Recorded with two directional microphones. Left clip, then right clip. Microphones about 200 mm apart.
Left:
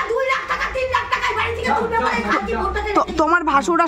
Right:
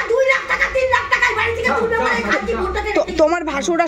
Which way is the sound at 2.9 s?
30° left (ahead or behind).